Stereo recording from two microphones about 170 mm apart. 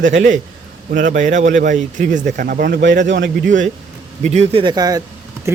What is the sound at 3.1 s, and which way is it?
Speech, 90° right.